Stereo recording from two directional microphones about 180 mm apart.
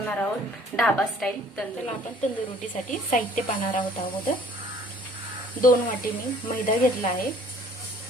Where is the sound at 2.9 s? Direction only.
45° left (ahead or behind).